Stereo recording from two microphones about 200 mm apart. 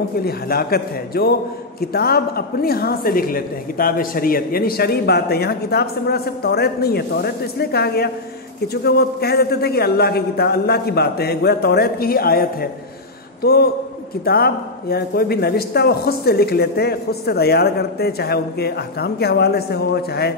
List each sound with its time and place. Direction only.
0.2 s a woman's voice: 50° left (ahead or behind)